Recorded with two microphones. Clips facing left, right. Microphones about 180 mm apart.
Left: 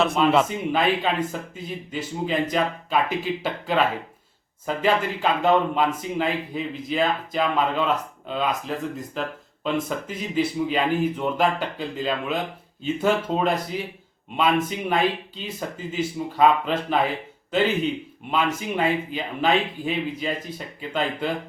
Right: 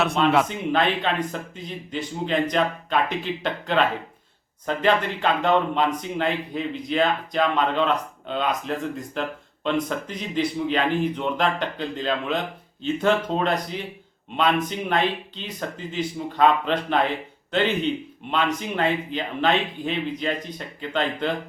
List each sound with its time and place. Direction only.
0.0 s speech: centre (ahead or behind)